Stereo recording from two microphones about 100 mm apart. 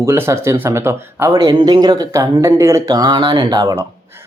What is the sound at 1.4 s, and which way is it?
Speech, 45° right (ahead or behind).